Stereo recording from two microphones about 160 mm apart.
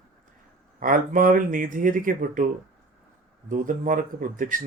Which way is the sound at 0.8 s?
60° right (ahead or behind).